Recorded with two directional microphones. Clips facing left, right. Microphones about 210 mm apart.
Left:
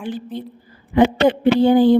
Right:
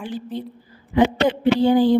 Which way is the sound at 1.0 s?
55° left (ahead or behind).